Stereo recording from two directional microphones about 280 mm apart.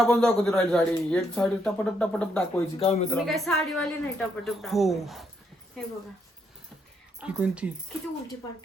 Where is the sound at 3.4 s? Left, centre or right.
Centre.